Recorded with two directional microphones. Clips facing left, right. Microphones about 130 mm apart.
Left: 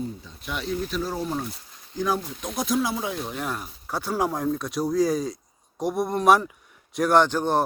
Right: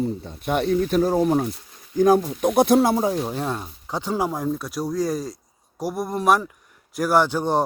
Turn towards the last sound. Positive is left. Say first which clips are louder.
# right 1 dB
turn(degrees=-15)  # may be behind; listen again after turning